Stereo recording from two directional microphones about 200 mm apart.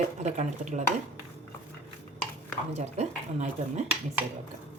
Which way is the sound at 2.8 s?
35° right (ahead or behind).